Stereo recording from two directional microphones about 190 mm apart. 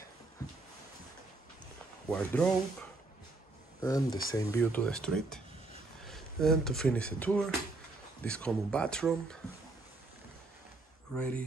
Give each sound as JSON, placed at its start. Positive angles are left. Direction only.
{"t": 2.0, "sound": "speech", "side_deg": 5}
{"t": 3.8, "sound": "speech", "side_deg": 20}
{"t": 11.1, "sound": "speech", "side_deg": 5}